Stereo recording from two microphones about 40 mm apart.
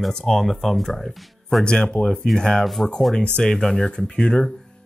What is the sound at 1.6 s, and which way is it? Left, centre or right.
Speech, left.